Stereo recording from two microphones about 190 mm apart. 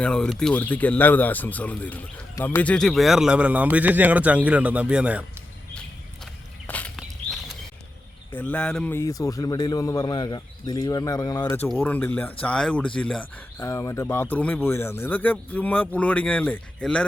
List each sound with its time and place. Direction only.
0.0 s a man's voice: 5° left (ahead or behind)
6.7 s a sound: 10° left (ahead or behind)
8.3 s a man's voice: 10° left (ahead or behind)
13.6 s speech: 15° left (ahead or behind)